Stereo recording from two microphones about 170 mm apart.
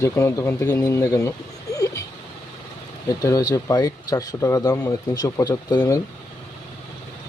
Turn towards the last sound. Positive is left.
turn(degrees=20)  # may be behind; listen again after turning